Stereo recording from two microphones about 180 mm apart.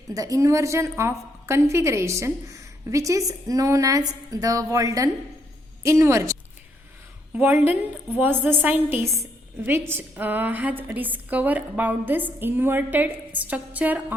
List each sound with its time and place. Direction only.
0.1 s a woman's voice: 20° right (ahead or behind)
7.3 s a woman's voice: 10° right (ahead or behind)